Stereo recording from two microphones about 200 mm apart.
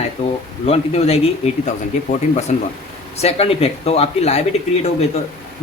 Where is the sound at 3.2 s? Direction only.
30° left (ahead or behind).